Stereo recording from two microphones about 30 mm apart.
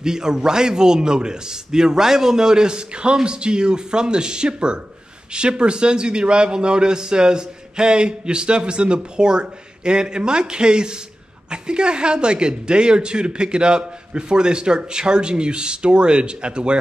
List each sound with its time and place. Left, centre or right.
0.0 s a man's voice: right